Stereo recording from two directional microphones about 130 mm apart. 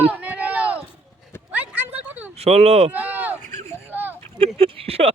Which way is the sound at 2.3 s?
55° right (ahead or behind).